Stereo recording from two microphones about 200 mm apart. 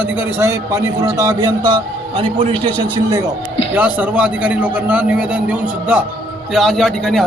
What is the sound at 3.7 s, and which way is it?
A man's voice, 10° right (ahead or behind).